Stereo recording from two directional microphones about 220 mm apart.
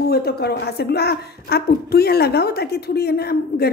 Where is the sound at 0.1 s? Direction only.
45° left (ahead or behind).